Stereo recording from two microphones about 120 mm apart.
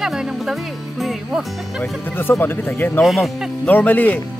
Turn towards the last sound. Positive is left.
turn(degrees=15)  # may be behind; listen again after turning